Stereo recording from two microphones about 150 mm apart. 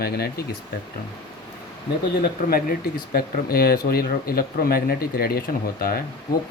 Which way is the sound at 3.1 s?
85° left.